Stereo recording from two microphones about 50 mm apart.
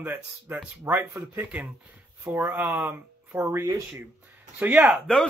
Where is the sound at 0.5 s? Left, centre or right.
Right.